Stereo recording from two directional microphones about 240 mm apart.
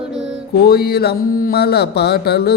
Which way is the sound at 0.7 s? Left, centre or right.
Left.